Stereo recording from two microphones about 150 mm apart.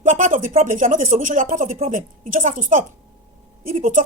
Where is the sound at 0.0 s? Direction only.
55° right (ahead or behind).